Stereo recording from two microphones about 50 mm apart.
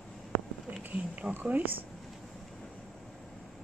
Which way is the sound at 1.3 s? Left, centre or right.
Right.